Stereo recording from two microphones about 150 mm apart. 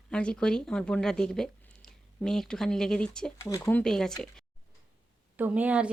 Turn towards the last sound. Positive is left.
turn(degrees=-10)  # may be behind; listen again after turning